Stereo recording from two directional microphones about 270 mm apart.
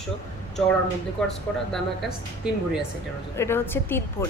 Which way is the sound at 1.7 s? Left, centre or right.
Centre.